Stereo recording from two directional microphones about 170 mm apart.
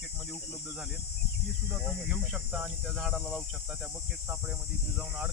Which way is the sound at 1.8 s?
5° right (ahead or behind).